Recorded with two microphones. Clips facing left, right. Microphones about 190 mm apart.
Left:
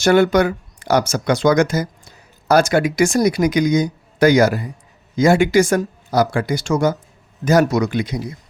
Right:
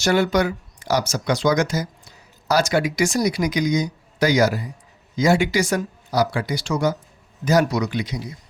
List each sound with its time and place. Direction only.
0.0 s speech: 55° left (ahead or behind)